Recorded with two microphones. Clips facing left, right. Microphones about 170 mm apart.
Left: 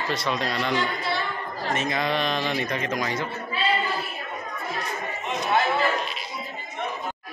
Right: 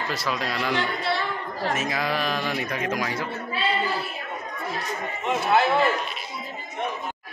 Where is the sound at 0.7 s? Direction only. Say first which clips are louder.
Right 1 dB; 70° right (ahead or behind).